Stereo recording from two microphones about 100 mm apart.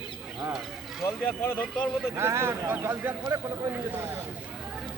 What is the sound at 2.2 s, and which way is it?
Speech, 25° right (ahead or behind).